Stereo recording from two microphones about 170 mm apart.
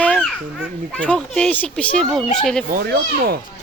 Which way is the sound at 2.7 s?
65° right (ahead or behind).